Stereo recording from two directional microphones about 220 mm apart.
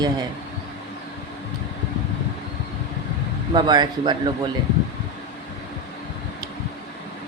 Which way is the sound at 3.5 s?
20° right (ahead or behind).